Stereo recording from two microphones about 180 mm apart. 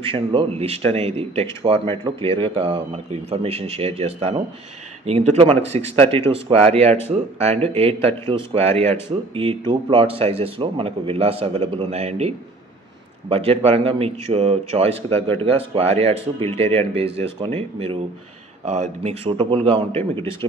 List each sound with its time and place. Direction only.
0.0 s a man's voice: 30° right (ahead or behind)
19.9 s speech: 10° left (ahead or behind)